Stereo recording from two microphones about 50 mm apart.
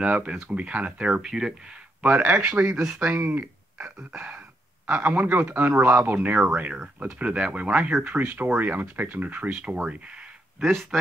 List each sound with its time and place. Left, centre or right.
0.0 s speech: right
1.2 s speech: centre
2.0 s speech: right
3.3 s a sound: right
4.1 s speech: right
6.4 s speech: right
10.6 s speech: centre